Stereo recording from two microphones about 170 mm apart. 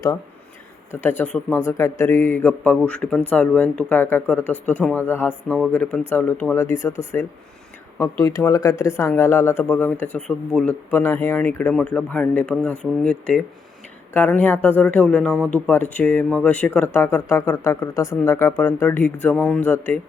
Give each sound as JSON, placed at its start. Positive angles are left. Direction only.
{"t": 1.0, "sound": "speech", "side_deg": 10}